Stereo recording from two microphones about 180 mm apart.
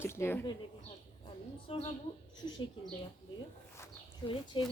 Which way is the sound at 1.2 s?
30° left (ahead or behind).